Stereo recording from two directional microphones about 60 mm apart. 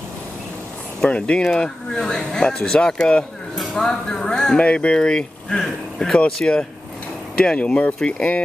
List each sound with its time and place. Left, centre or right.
1.0 s speech: centre
6.4 s speech: left